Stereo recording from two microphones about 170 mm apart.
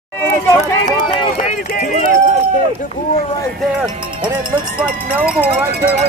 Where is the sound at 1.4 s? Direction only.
50° left (ahead or behind).